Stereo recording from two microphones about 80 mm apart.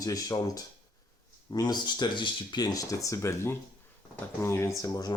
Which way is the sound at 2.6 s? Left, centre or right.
Left.